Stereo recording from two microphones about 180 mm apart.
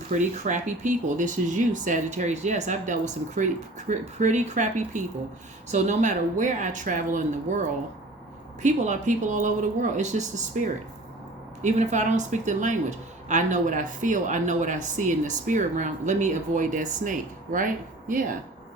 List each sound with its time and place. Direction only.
0.1 s speech: 45° right (ahead or behind)
8.6 s speech: 40° right (ahead or behind)
11.6 s speech: 40° right (ahead or behind)